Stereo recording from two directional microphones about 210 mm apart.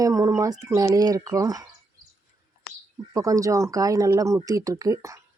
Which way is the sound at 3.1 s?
15° right (ahead or behind).